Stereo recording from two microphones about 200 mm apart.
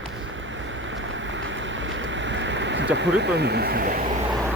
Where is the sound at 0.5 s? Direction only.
70° right (ahead or behind); by 4.0 s 45° right (ahead or behind).